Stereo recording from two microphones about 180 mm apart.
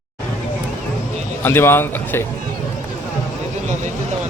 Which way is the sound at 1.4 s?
10° left (ahead or behind).